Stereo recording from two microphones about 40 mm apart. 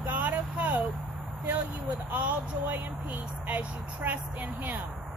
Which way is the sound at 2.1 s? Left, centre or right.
Right.